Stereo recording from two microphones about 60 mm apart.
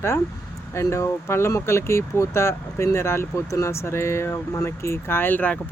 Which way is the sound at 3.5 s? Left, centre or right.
Left.